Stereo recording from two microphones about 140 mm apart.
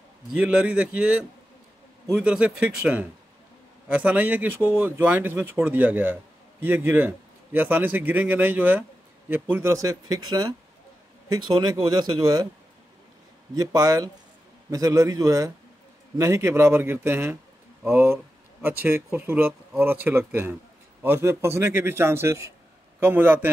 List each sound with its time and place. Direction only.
0.3 s a man's voice: 10° right (ahead or behind); by 12.4 s 30° right (ahead or behind)
13.6 s a man's voice: 25° right (ahead or behind)